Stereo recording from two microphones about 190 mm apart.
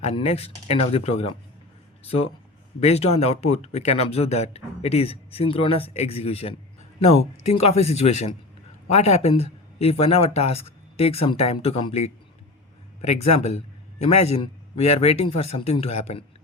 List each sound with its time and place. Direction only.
0.0 s speech: 30° left (ahead or behind)